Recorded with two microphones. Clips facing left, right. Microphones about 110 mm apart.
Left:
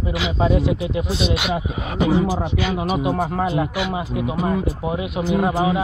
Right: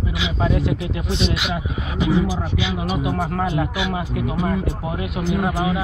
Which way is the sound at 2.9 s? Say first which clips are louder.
Left 1 dB; 30° left (ahead or behind).